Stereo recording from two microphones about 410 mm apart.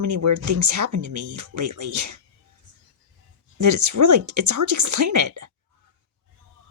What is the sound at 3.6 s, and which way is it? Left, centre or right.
Speech, right.